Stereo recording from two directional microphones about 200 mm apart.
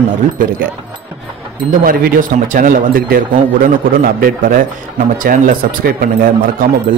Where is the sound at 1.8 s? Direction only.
45° right (ahead or behind).